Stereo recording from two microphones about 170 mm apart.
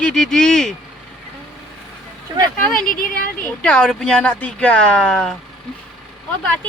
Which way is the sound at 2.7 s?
55° left (ahead or behind).